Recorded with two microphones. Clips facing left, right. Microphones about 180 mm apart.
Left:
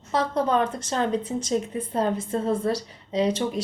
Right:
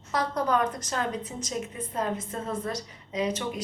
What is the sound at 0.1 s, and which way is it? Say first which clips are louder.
Speech: left 3 dB; 25° left (ahead or behind).